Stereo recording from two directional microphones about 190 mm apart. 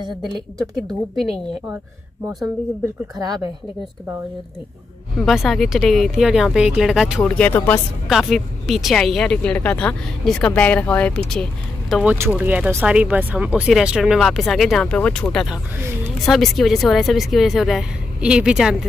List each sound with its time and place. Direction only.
0.7 s speech: centre (ahead or behind)
2.4 s speech: 20° right (ahead or behind)
5.2 s speech: centre (ahead or behind)
11.9 s speech: 5° right (ahead or behind)